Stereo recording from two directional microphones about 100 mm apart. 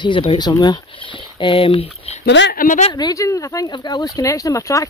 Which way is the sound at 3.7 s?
45° left (ahead or behind).